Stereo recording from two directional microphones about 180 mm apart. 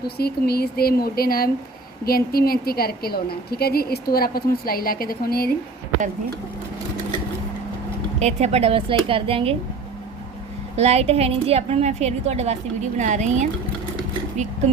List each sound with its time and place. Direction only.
0.2 s a woman's voice: 60° left (ahead or behind)
8.2 s a woman's voice: 35° right (ahead or behind)
10.8 s a woman's voice: 35° right (ahead or behind)